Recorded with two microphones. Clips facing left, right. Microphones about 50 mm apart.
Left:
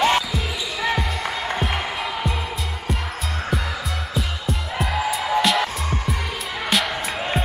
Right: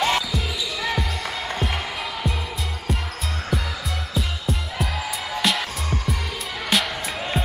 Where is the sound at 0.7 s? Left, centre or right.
Centre.